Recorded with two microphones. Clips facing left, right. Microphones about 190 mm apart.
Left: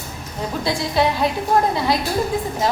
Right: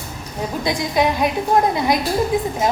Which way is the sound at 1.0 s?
15° right (ahead or behind).